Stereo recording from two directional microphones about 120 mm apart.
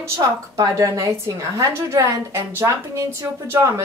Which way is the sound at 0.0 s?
25° right (ahead or behind).